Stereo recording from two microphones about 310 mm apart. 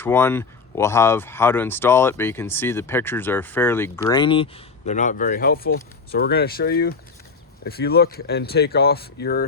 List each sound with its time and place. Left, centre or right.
0.0 s speech: centre; by 9.5 s left